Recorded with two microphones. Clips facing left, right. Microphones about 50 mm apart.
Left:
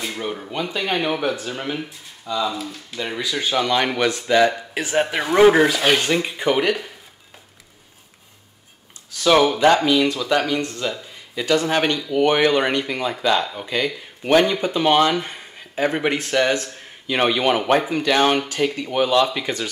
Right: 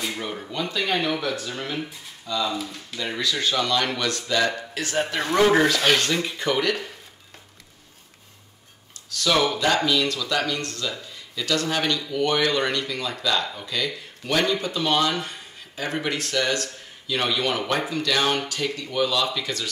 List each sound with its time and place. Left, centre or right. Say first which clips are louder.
0.0 s speech: left 3 dB; centre
0.5 s speech: left 1 dB; left
2.5 s speech: left 1 dB; centre
3.0 s speech: left 1 dB; centre
9.1 s speech: left 6 dB; left